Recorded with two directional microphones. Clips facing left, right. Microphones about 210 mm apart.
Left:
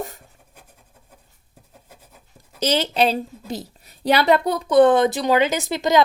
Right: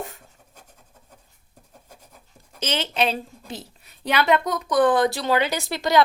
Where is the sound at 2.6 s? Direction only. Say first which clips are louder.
Left 5 dB; 35° left (ahead or behind).